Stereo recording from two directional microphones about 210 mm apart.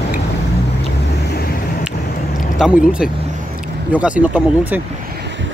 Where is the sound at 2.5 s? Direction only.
5° right (ahead or behind).